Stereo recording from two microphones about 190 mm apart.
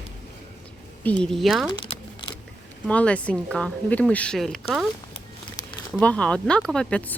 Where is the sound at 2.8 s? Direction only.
5° left (ahead or behind).